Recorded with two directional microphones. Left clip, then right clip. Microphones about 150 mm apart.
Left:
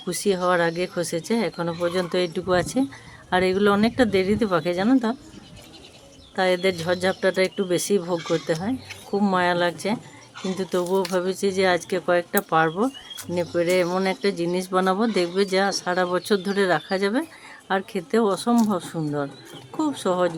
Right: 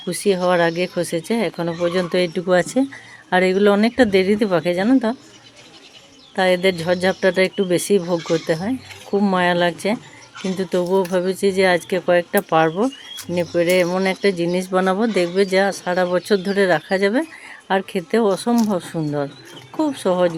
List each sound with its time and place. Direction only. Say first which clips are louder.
0.0 s speech: right 4 dB; 10° right (ahead or behind)
6.3 s speech: right 5 dB; 15° right (ahead or behind)